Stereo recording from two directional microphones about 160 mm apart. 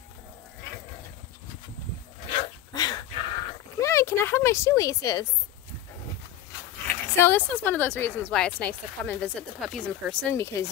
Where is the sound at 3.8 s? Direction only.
20° left (ahead or behind).